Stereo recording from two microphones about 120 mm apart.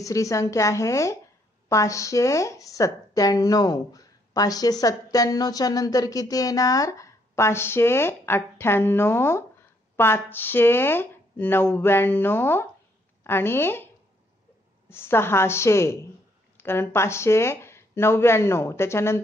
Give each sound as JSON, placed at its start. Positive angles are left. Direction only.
{"t": 0.0, "sound": "a woman's voice", "side_deg": 25}
{"t": 14.9, "sound": "a woman's voice", "side_deg": 20}